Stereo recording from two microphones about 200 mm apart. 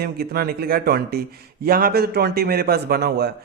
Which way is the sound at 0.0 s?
50° right (ahead or behind).